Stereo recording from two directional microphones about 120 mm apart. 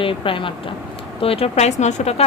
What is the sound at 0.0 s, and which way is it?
Speech, 45° left (ahead or behind).